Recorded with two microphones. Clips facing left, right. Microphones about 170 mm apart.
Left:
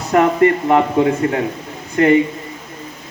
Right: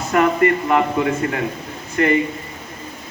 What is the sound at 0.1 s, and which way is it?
Speech, 30° left (ahead or behind).